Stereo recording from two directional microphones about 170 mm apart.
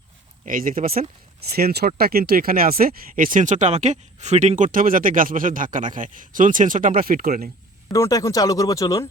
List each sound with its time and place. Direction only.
0.4 s speech: 55° right (ahead or behind)
1.5 s speech: 65° right (ahead or behind)
7.9 s speech: 20° left (ahead or behind)